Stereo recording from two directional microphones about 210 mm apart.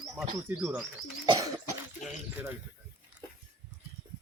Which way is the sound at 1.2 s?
20° right (ahead or behind).